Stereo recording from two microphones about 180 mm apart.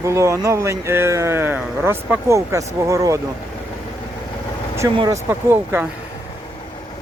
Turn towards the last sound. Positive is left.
turn(degrees=-10)  # may be behind; listen again after turning